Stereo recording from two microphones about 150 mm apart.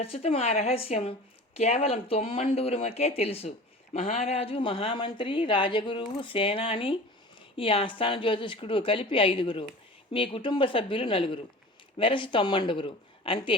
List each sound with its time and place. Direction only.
0.0 s a woman's voice: 40° left (ahead or behind)